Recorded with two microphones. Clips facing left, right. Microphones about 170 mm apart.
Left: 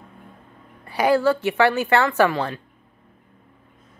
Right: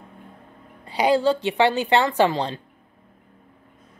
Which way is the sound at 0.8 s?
15° right (ahead or behind).